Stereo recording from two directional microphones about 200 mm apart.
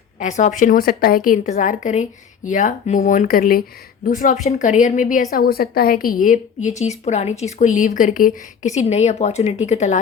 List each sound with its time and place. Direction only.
0.2 s a woman's voice: 35° left (ahead or behind)